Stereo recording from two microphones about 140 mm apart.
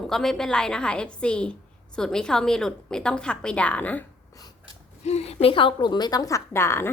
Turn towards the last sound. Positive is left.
turn(degrees=20)  # may be behind; listen again after turning